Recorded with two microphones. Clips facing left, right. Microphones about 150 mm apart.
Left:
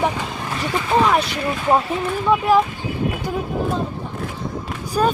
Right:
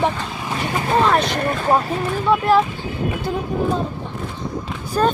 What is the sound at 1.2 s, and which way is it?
Speech, 50° right (ahead or behind).